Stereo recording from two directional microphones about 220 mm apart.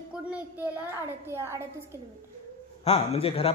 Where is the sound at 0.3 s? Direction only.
10° right (ahead or behind).